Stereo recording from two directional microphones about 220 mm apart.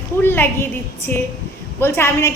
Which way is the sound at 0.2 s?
10° left (ahead or behind).